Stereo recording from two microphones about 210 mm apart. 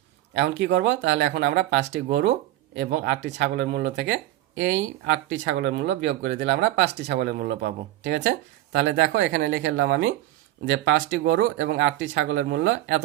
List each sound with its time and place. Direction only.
0.3 s speech: 55° right (ahead or behind)